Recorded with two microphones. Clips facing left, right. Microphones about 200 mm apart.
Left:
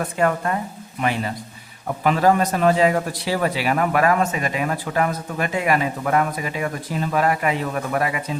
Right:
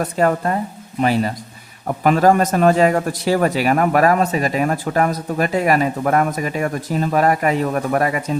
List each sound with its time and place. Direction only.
0.0 s a man's voice: 40° right (ahead or behind)